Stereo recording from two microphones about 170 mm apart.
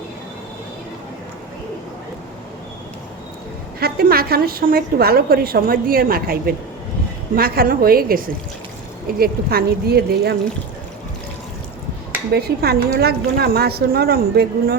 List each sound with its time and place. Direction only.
3.8 s a woman's voice: 65° right (ahead or behind)
12.3 s a woman's voice: 65° right (ahead or behind)